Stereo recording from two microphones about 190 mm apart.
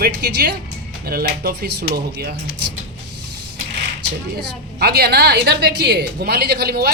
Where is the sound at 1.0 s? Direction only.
55° right (ahead or behind).